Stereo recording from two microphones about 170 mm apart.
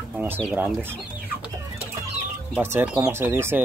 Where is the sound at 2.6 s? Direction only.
15° right (ahead or behind).